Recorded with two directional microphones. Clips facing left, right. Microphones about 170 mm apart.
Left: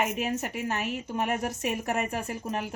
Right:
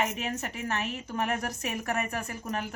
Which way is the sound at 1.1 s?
25° left (ahead or behind).